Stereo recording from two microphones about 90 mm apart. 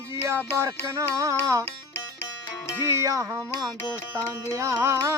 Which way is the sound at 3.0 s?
40° right (ahead or behind).